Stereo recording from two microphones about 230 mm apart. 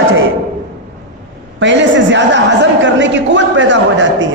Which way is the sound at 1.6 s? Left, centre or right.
Right.